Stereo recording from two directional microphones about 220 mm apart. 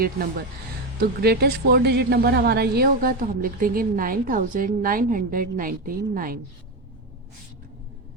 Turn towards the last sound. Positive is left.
turn(degrees=-40)  # may be behind; listen again after turning